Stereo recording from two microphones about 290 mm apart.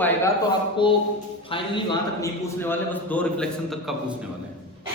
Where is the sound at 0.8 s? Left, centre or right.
Centre.